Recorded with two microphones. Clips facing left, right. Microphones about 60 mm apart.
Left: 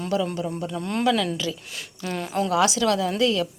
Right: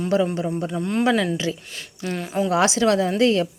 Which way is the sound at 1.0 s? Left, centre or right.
Right.